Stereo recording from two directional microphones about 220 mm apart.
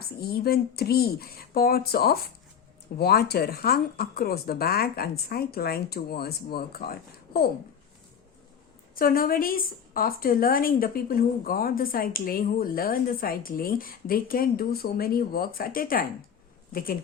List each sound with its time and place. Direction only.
0.0 s speech: 45° left (ahead or behind)
9.0 s a woman's voice: 40° left (ahead or behind)